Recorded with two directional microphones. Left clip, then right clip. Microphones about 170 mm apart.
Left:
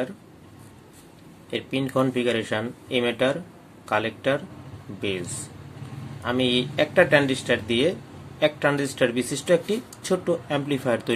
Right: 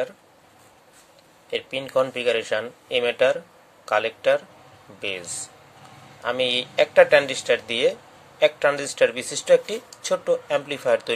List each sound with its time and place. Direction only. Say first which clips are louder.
1.5 s speech: right 2 dB; 20° right (ahead or behind)
6.2 s speech: right 1 dB; 25° right (ahead or behind)